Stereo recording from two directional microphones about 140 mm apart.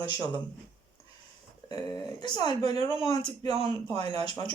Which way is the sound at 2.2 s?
30° left (ahead or behind).